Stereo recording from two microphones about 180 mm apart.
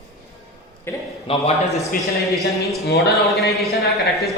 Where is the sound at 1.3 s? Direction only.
30° left (ahead or behind).